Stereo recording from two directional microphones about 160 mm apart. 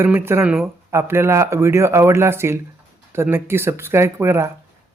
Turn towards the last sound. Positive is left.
turn(degrees=-15)  # may be behind; listen again after turning